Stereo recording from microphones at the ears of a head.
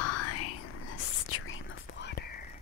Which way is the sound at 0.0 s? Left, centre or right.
Left.